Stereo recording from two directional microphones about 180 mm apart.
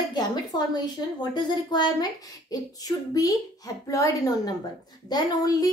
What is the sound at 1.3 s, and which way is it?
Speech, 25° left (ahead or behind).